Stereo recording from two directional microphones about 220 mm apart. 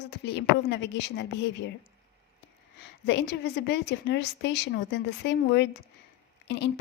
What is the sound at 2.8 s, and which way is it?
Speech, 55° left (ahead or behind).